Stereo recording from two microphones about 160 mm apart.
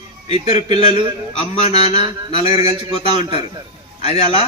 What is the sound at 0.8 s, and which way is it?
A man's voice, 40° left (ahead or behind).